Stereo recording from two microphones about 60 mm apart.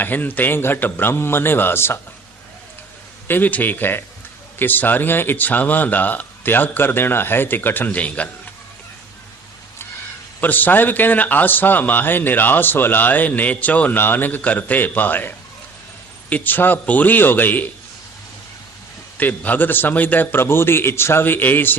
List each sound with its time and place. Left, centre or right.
0.0 s a man's voice: left
3.2 s a man's voice: left
10.4 s a man's voice: left
19.1 s a man's voice: left